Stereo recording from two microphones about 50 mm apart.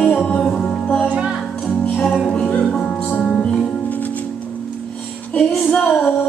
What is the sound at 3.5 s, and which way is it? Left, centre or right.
Music, left.